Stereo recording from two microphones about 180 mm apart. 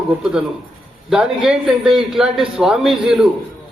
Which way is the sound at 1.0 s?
5° right (ahead or behind).